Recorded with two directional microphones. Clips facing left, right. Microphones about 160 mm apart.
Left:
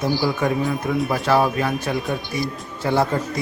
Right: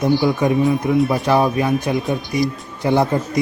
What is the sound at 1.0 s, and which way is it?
Speech, centre (ahead or behind).